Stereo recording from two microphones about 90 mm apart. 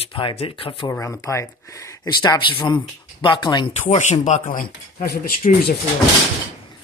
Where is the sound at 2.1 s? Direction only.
55° left (ahead or behind).